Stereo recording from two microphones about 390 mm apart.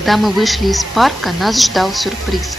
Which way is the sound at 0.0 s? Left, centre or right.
Centre.